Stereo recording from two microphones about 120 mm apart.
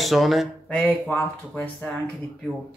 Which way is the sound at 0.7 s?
10° left (ahead or behind).